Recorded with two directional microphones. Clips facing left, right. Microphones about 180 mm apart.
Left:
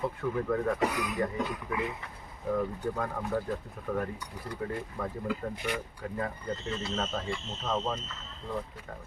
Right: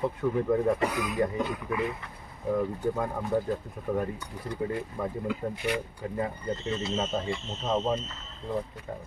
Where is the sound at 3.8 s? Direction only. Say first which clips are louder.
Right 4 dB; 15° right (ahead or behind).